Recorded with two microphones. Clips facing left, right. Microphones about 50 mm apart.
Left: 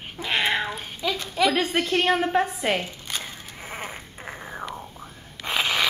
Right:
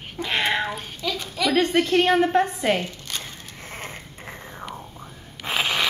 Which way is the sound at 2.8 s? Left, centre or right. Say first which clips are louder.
Even; centre.